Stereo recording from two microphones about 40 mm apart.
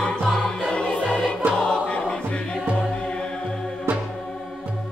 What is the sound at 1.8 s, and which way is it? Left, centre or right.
Choir, left.